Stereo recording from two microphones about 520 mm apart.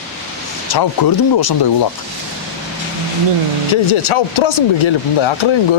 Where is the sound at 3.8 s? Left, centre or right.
Left.